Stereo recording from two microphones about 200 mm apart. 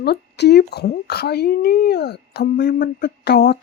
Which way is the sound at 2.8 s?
60° left (ahead or behind).